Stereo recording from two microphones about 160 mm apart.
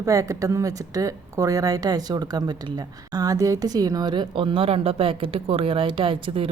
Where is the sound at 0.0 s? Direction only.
20° right (ahead or behind).